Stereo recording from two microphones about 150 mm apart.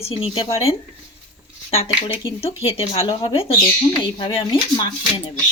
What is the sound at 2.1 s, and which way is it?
Speech, 40° left (ahead or behind).